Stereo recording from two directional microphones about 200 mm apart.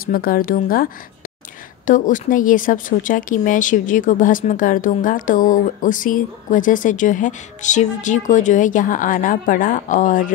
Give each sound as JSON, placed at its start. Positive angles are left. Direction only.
{"t": 0.0, "sound": "speech", "side_deg": 45}
{"t": 1.9, "sound": "speech", "side_deg": 40}